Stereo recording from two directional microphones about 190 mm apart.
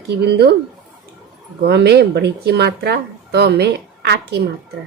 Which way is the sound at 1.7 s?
60° right (ahead or behind).